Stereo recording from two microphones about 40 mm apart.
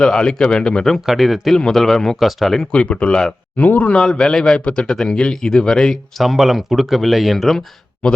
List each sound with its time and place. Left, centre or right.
0.0 s speech: centre
1.0 s speech: centre
1.5 s speech: centre
2.1 s speech: centre
2.7 s speech: left
3.9 s speech: centre
4.6 s speech: left
6.1 s speech: centre
8.0 s speech: left